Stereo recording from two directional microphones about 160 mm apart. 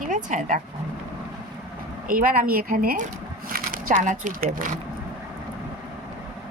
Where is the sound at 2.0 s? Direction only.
65° right (ahead or behind).